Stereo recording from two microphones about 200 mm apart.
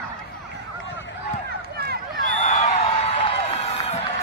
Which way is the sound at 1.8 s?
50° right (ahead or behind).